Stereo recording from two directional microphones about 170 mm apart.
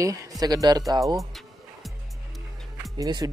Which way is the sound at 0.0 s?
20° right (ahead or behind).